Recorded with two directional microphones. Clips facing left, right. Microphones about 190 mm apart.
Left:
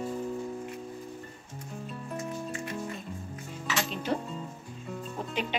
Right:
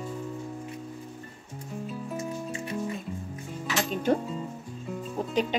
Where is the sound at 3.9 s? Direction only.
45° right (ahead or behind).